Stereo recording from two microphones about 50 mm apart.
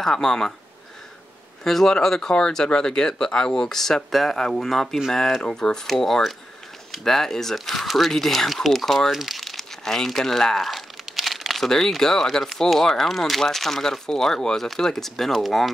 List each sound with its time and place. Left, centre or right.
0.0 s speech: centre
1.6 s speech: centre
9.1 s crumpling: centre
11.7 s speech: centre